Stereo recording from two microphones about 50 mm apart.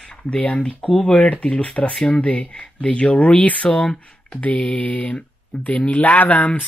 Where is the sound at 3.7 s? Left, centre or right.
Centre.